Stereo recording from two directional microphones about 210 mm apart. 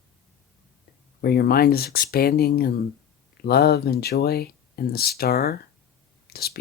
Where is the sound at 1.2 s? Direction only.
50° left (ahead or behind).